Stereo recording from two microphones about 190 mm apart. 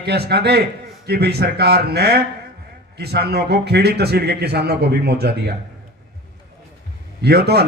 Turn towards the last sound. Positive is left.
turn(degrees=-60)  # may be behind; listen again after turning